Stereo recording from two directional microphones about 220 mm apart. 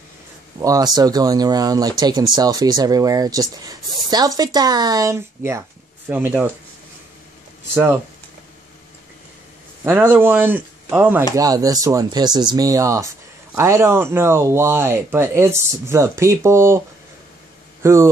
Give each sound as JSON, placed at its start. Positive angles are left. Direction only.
{"t": 0.6, "sound": "speech", "side_deg": -15}
{"t": 7.7, "sound": "speech", "side_deg": -10}
{"t": 9.8, "sound": "speech", "side_deg": -10}
{"t": 17.8, "sound": "speech", "side_deg": -15}